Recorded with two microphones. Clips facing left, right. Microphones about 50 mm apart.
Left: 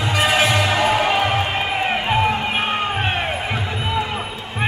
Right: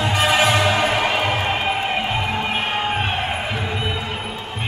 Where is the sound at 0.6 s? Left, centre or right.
Centre.